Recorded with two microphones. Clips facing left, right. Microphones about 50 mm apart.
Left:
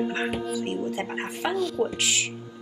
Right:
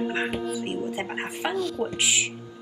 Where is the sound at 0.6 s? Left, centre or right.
Centre.